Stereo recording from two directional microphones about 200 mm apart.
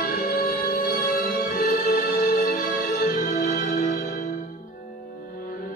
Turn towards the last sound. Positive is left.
turn(degrees=45)  # may be behind; listen again after turning